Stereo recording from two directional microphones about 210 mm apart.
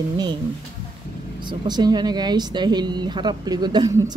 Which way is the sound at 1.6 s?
20° right (ahead or behind).